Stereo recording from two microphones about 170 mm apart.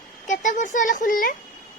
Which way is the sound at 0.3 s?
45° left (ahead or behind).